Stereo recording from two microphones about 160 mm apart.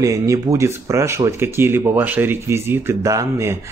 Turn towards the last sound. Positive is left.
turn(degrees=-20)  # may be behind; listen again after turning